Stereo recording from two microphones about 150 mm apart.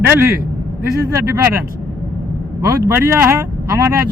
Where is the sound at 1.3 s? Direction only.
15° right (ahead or behind).